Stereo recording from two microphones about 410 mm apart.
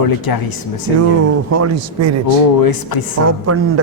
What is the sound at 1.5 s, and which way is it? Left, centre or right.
Speech, right.